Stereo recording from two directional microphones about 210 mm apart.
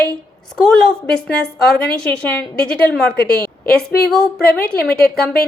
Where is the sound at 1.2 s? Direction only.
5° left (ahead or behind).